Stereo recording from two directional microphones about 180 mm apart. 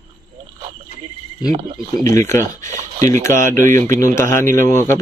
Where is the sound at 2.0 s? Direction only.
15° left (ahead or behind).